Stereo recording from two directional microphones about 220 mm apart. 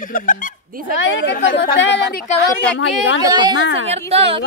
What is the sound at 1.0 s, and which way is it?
A woman's voice, 55° left (ahead or behind).